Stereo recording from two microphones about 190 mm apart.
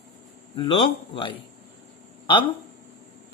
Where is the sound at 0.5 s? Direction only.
25° left (ahead or behind).